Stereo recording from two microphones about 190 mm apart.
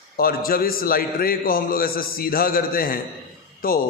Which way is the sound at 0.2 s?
50° left (ahead or behind).